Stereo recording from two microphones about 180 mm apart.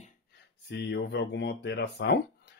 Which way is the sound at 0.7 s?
75° left (ahead or behind).